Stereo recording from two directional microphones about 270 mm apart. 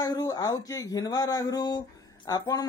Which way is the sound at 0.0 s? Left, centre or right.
Centre.